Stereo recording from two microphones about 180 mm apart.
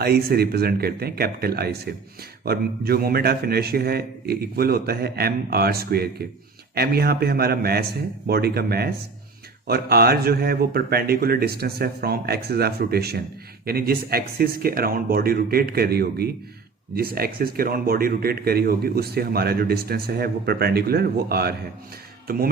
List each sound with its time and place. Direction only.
0.0 s a man's voice: 60° right (ahead or behind)